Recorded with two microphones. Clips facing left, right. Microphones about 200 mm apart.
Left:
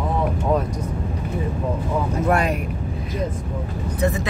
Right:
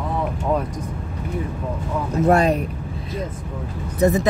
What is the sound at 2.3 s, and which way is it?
Speech, 35° right (ahead or behind).